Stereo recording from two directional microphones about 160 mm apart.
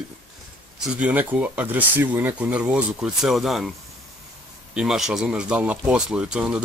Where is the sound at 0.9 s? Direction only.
10° right (ahead or behind).